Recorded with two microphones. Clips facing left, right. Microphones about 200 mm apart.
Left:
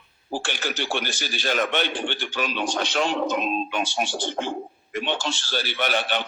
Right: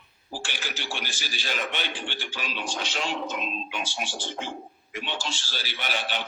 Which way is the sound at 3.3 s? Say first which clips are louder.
Left 8 dB; 50° left (ahead or behind).